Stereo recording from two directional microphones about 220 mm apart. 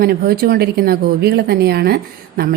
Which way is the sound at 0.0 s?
45° right (ahead or behind).